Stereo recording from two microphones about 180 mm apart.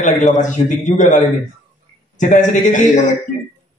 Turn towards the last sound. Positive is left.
turn(degrees=45)  # may be behind; listen again after turning